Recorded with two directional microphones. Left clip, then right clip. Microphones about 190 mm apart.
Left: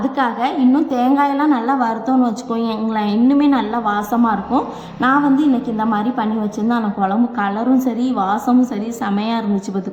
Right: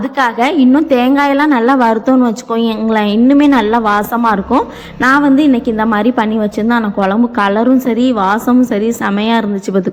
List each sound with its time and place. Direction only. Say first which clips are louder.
0.2 s a woman's voice: right 7 dB; 25° right (ahead or behind)